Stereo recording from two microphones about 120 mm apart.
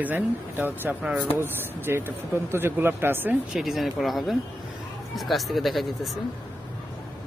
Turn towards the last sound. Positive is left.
turn(degrees=0)  # may be behind; listen again after turning